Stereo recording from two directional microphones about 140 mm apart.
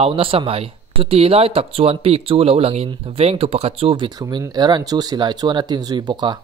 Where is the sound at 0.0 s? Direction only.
40° right (ahead or behind).